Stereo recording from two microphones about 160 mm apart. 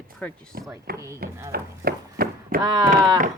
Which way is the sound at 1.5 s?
70° right (ahead or behind).